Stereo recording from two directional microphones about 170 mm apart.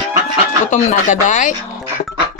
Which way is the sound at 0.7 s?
45° left (ahead or behind).